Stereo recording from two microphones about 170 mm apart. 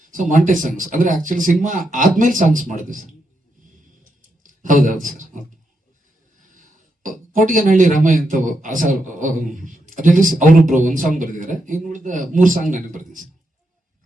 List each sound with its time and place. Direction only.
0.1 s speech: 50° right (ahead or behind)
4.4 s a sound: 50° right (ahead or behind)
5.0 s speech: 50° right (ahead or behind)
6.5 s speech: 50° right (ahead or behind)